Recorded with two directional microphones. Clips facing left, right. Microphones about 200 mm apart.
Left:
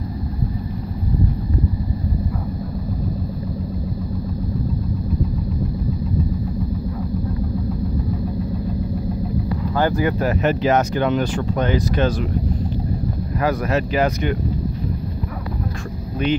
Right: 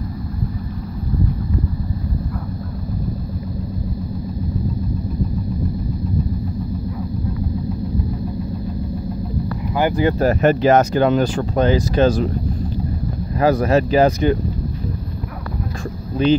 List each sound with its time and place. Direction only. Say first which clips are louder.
9.8 s a sound: right 1 dB; 15° right (ahead or behind)
10.0 s speech: right 4 dB; 35° right (ahead or behind)
13.4 s speech: right 5 dB; 30° right (ahead or behind)
16.2 s speech: right 5 dB; 30° right (ahead or behind)